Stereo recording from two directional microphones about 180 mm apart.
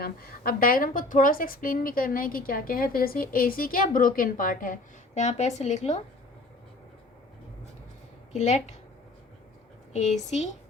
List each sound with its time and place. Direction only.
0.0 s a woman's voice: 55° left (ahead or behind); by 6.0 s 40° left (ahead or behind)
8.3 s speech: 40° left (ahead or behind)
9.9 s a woman's voice: 40° left (ahead or behind)